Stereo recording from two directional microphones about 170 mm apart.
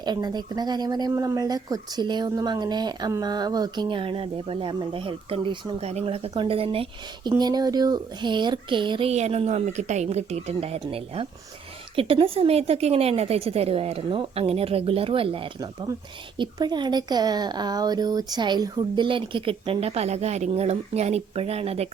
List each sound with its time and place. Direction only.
0.0 s speech: 25° right (ahead or behind)